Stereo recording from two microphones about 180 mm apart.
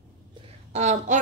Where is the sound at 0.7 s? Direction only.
40° right (ahead or behind).